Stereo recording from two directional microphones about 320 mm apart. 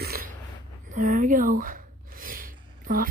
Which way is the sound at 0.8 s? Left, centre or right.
Right.